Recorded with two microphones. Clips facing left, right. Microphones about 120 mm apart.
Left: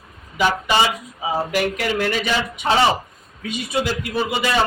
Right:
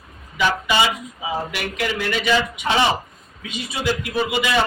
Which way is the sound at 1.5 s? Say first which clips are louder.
Left 4 dB; 45° left (ahead or behind).